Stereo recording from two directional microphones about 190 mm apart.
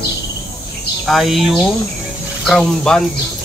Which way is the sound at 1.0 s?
Centre (ahead or behind).